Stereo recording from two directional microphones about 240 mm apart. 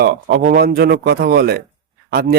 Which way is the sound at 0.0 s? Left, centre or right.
Right.